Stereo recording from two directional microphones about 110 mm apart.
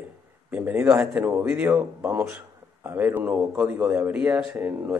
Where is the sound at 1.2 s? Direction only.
20° right (ahead or behind).